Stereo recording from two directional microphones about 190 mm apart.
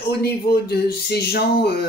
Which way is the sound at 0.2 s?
55° left (ahead or behind).